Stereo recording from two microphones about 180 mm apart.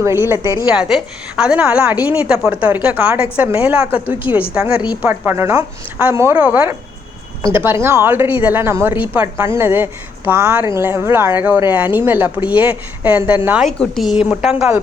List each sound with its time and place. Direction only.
0.0 s speech: 15° right (ahead or behind)
4.7 s a woman's voice: 25° left (ahead or behind)
5.0 s speech: 10° right (ahead or behind)
13.7 s a woman's voice: centre (ahead or behind)